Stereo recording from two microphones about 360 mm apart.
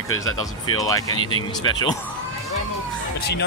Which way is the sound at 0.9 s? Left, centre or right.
Centre.